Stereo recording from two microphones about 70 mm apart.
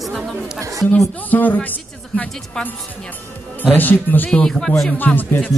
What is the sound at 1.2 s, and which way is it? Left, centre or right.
Speech, left.